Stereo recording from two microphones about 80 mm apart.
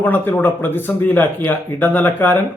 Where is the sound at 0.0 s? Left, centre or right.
Left.